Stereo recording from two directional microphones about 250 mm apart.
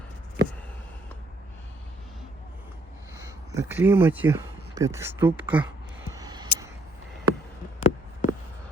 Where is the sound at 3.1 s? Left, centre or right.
Centre.